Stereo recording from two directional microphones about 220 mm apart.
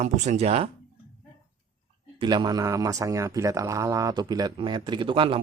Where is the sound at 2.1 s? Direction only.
20° right (ahead or behind).